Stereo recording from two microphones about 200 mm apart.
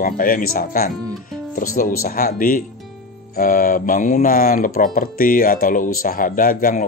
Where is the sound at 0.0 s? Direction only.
45° left (ahead or behind).